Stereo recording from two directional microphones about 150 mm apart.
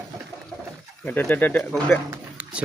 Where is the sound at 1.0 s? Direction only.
10° left (ahead or behind).